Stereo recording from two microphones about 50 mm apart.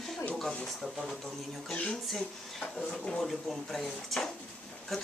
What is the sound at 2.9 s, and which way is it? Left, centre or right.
Speech, centre.